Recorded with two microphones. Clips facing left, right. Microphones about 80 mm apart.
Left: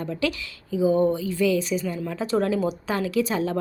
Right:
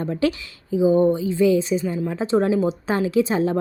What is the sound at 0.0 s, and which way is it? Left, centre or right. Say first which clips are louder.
A woman's voice: right 5 dB; right.